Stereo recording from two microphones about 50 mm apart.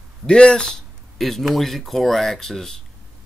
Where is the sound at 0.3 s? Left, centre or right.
Centre.